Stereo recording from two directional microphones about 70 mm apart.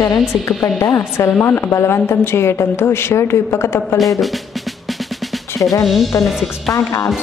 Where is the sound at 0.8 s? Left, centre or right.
Left.